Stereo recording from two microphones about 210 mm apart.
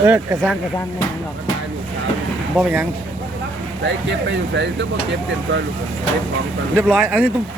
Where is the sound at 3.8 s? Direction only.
60° right (ahead or behind).